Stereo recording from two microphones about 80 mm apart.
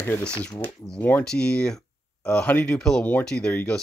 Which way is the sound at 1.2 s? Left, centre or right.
Centre.